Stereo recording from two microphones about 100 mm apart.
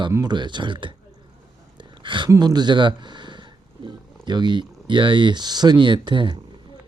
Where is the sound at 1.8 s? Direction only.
55° right (ahead or behind).